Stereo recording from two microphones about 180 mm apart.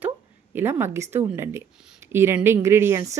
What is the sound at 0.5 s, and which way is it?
Speech, 15° right (ahead or behind).